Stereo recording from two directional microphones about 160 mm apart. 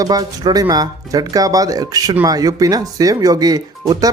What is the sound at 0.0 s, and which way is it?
Speech, 25° right (ahead or behind).